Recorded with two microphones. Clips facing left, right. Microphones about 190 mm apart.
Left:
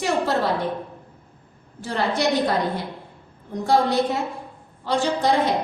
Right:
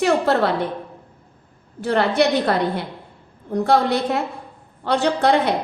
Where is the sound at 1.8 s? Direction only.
60° right (ahead or behind).